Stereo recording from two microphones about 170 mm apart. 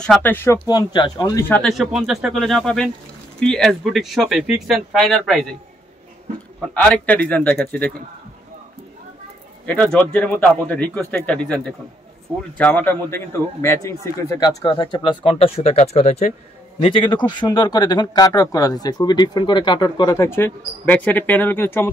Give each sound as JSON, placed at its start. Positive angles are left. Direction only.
{"t": 0.0, "sound": "a man's voice", "side_deg": 10}
{"t": 0.7, "sound": "speech", "side_deg": 25}
{"t": 1.6, "sound": "speech", "side_deg": 0}
{"t": 6.6, "sound": "a man's voice", "side_deg": 5}
{"t": 9.7, "sound": "a man's voice", "side_deg": 5}
{"t": 14.6, "sound": "speech", "side_deg": 30}
{"t": 16.8, "sound": "speech", "side_deg": 30}